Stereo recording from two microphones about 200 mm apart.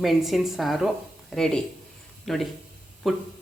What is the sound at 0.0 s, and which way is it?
Speech, centre (ahead or behind).